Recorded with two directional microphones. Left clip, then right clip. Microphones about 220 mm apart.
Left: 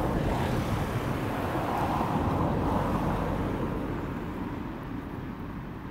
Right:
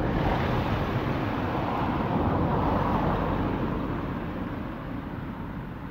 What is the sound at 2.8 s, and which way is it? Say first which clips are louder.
Vehicle: right 3 dB; 20° right (ahead or behind).